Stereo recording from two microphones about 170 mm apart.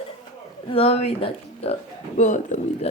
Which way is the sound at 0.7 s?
35° left (ahead or behind).